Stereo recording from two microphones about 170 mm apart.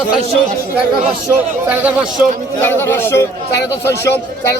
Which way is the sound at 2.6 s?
15° left (ahead or behind).